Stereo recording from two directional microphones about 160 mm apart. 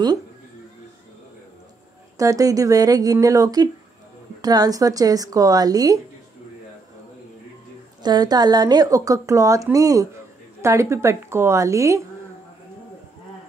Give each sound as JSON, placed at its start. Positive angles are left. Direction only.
{"t": 2.1, "sound": "speech", "side_deg": -20}
{"t": 8.0, "sound": "a woman's voice", "side_deg": -25}